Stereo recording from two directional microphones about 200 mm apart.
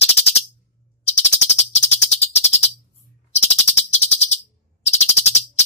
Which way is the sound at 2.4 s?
35° left (ahead or behind).